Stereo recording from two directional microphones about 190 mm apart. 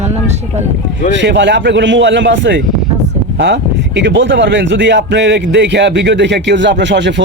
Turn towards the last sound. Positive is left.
turn(degrees=-70)  # may be behind; listen again after turning